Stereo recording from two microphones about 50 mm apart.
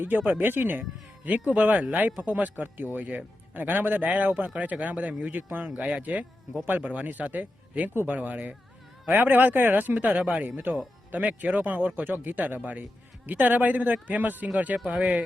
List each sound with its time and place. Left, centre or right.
0.3 s speech: right
0.8 s speech: right
5.7 s speech: right